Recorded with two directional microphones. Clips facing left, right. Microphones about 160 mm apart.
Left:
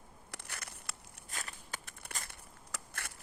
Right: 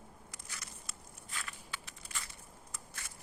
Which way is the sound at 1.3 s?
45° left (ahead or behind).